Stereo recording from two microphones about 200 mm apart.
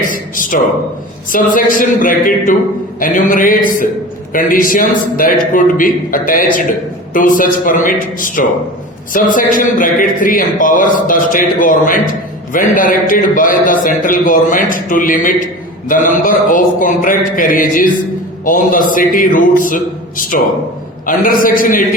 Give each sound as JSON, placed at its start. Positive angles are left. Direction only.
{"t": 0.1, "sound": "a man's voice", "side_deg": 40}